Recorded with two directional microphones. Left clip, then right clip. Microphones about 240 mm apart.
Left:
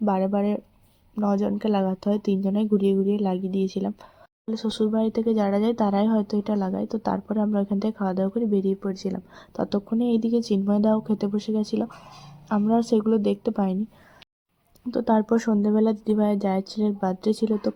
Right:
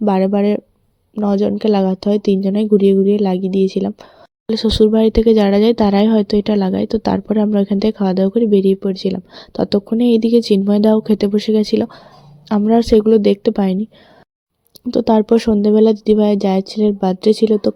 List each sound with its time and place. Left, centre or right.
0.0 s speech: right
14.8 s speech: right